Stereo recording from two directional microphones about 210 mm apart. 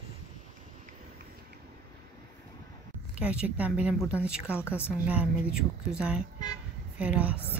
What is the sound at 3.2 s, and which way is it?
A woman's voice, 5° right (ahead or behind).